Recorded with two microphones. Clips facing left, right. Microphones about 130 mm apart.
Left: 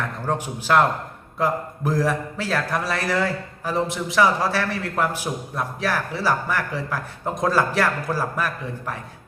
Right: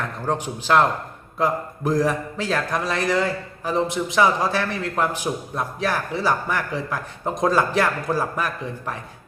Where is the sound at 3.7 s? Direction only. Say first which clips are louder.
Right 1 dB; 5° left (ahead or behind).